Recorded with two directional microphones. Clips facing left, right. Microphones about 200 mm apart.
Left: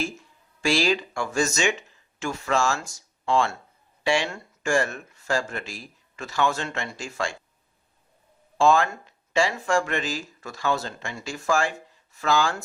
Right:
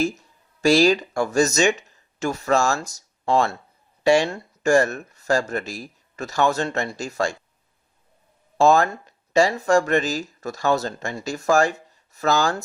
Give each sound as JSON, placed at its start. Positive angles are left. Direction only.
{"t": 0.0, "sound": "speech", "side_deg": -40}
{"t": 8.5, "sound": "speech", "side_deg": -40}